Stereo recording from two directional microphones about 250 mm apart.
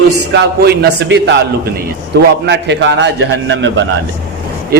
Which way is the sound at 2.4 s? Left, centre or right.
Right.